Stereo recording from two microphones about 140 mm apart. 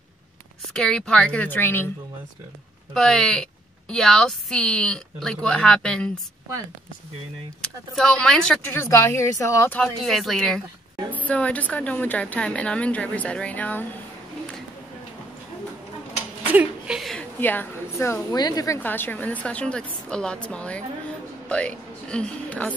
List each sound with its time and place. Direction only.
0.7 s speech: 5° left (ahead or behind)
2.9 s speech: 5° left (ahead or behind)
7.6 s speech: 5° left (ahead or behind)
8.7 s a woman's voice: 20° left (ahead or behind)
9.8 s speech: centre (ahead or behind)
16.4 s a sound: 10° right (ahead or behind)
17.4 s a woman's voice: 15° left (ahead or behind)
18.8 s a woman's voice: 15° left (ahead or behind)